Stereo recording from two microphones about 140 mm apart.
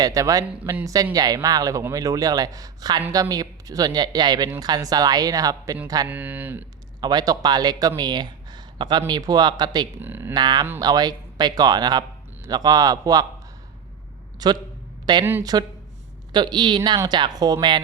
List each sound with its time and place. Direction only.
0.0 s speech: 25° right (ahead or behind)
6.1 s speech: 10° right (ahead or behind)
7.0 s speech: 30° right (ahead or behind)
10.0 s speech: 15° right (ahead or behind)
10.3 s speech: 30° right (ahead or behind)
14.3 s a man's voice: 30° right (ahead or behind)
15.2 s speech: 15° right (ahead or behind)
16.3 s speech: 30° right (ahead or behind)